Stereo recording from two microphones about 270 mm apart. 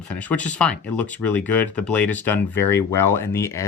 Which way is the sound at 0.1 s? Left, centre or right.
Centre.